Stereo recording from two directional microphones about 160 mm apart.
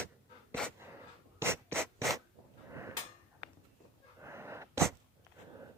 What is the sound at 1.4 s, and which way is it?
Scratch, 15° right (ahead or behind).